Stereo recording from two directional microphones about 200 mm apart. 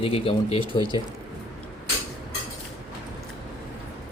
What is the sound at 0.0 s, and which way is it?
Speech, 30° left (ahead or behind).